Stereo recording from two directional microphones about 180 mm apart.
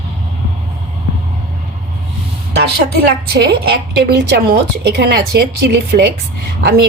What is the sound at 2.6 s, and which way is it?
A woman's voice, 60° right (ahead or behind).